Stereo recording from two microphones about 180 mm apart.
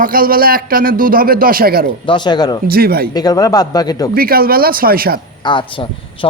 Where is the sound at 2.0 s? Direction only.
25° left (ahead or behind).